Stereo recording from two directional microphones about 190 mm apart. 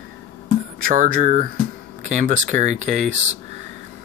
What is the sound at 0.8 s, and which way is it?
Speech, 50° right (ahead or behind).